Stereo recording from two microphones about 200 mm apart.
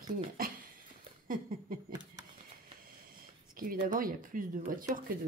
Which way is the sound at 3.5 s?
45° right (ahead or behind).